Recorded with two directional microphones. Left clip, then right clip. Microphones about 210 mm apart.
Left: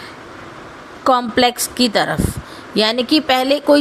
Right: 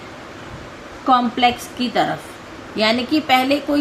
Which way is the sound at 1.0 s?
55° left (ahead or behind).